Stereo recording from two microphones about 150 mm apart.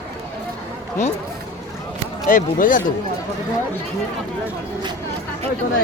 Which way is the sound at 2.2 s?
65° left (ahead or behind).